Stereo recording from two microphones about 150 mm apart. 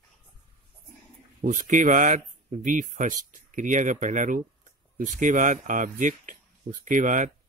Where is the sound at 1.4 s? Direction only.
60° right (ahead or behind).